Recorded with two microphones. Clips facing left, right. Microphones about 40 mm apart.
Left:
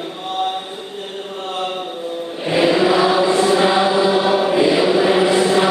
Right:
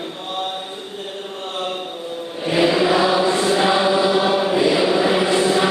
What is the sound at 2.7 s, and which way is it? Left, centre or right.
Chant, left.